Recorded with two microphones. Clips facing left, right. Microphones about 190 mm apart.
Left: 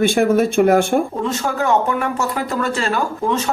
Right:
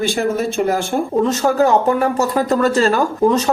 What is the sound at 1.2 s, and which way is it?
Speech, 35° right (ahead or behind).